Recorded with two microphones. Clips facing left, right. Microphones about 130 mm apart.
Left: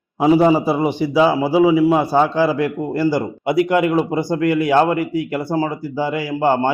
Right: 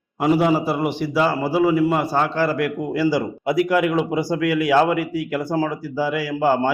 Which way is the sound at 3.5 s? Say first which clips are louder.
Left 2 dB; 60° left (ahead or behind).